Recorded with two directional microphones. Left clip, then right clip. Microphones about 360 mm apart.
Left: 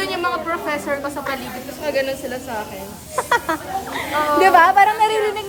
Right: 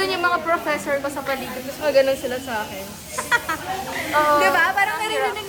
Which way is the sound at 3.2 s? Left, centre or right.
Centre.